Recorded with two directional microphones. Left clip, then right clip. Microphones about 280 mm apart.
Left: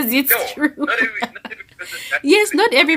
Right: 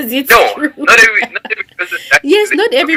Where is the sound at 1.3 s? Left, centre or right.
Right.